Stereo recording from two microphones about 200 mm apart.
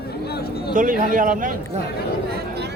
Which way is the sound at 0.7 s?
40° right (ahead or behind).